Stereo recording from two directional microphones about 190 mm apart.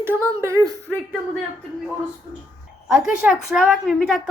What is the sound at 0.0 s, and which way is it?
Speech, 15° right (ahead or behind).